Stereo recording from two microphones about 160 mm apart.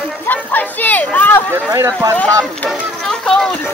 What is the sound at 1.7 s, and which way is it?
Speech, 20° right (ahead or behind).